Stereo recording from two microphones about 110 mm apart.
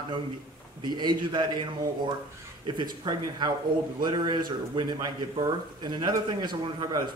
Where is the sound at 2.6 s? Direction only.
45° right (ahead or behind).